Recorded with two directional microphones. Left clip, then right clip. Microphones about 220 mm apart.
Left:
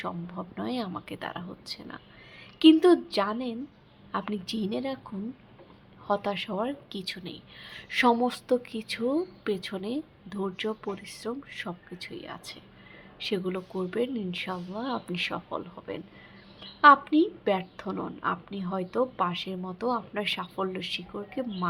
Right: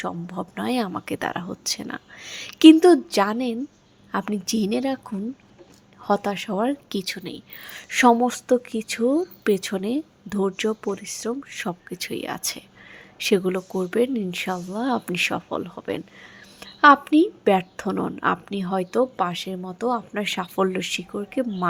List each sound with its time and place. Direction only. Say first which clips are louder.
0.0 s a woman's voice: right 6 dB; 30° right (ahead or behind)
2.7 s a woman's voice: right 6 dB; 20° right (ahead or behind)
6.1 s a woman's voice: right 5 dB; 20° right (ahead or behind)